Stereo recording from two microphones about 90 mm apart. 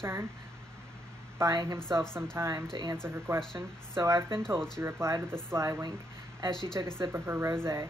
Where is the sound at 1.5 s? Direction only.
40° right (ahead or behind).